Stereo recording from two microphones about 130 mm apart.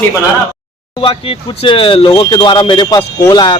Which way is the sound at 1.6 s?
40° left (ahead or behind).